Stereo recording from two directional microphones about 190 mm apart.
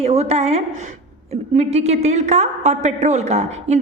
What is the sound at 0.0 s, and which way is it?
A woman's voice, 35° right (ahead or behind).